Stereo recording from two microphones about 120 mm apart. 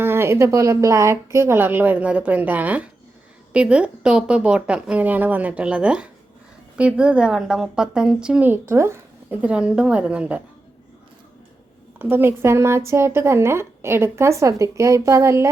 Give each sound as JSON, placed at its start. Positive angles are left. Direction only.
{"t": 0.0, "sound": "a woman's voice", "side_deg": -20}
{"t": 9.4, "sound": "a woman's voice", "side_deg": -10}
{"t": 11.9, "sound": "a woman's voice", "side_deg": -15}